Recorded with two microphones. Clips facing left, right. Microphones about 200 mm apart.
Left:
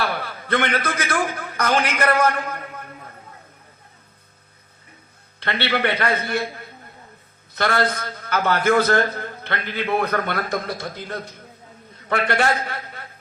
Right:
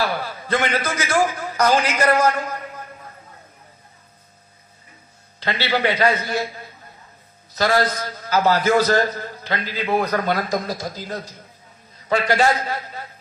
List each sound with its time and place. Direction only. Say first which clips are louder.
0.0 s a man's voice: right 2 dB; 60° left (ahead or behind)
5.4 s a man's voice: right 1 dB; 60° left (ahead or behind)